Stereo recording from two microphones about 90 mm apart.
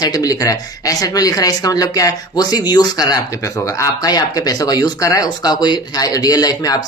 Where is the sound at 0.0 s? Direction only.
45° left (ahead or behind).